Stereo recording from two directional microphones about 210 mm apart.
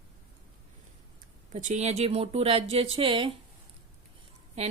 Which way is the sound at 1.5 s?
35° right (ahead or behind).